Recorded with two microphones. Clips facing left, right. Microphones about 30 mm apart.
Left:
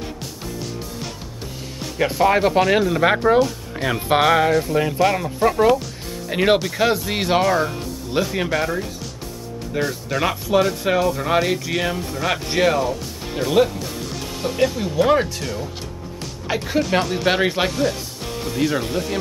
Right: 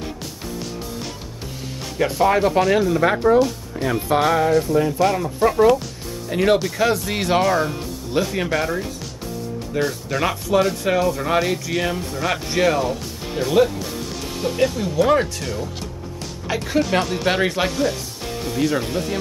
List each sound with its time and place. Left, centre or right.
2.0 s speech: centre; by 4.5 s left
4.9 s speech: centre
6.2 s speech: left
6.8 s speech: centre